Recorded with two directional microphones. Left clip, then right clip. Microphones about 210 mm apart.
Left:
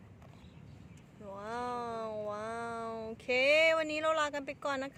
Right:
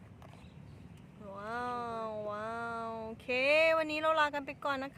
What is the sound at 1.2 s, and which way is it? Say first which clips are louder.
Cat: even; 10° left (ahead or behind).